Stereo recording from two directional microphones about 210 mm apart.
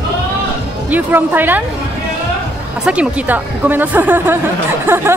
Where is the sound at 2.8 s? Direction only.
5° right (ahead or behind).